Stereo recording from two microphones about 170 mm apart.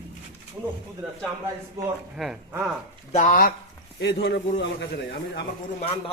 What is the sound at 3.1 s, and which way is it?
Speech, 50° left (ahead or behind).